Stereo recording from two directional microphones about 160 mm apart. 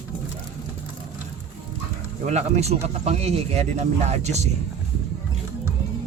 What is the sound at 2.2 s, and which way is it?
Speech, 45° right (ahead or behind).